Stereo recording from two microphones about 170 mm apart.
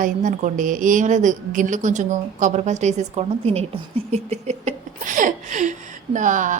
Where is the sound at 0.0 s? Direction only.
50° right (ahead or behind).